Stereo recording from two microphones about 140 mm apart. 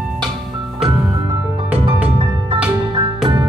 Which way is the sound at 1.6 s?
10° right (ahead or behind).